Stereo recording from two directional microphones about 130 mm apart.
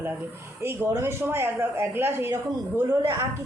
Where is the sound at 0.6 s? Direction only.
20° right (ahead or behind).